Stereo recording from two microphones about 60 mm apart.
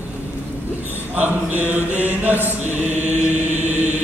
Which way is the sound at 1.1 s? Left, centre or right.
Right.